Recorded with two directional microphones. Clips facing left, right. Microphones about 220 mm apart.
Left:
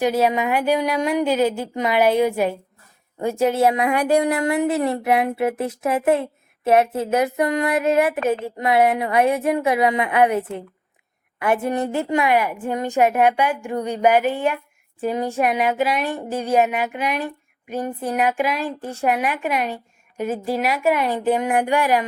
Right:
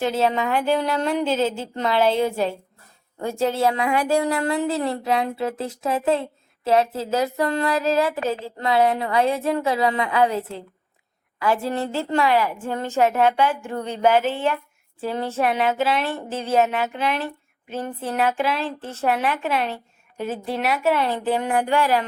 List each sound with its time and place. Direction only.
0.0 s speech: 15° left (ahead or behind)